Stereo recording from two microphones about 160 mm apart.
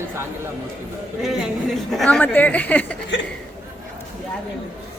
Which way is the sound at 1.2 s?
Centre (ahead or behind).